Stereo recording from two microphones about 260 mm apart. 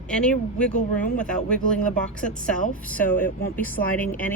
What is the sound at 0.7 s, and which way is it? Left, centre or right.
Speech, left.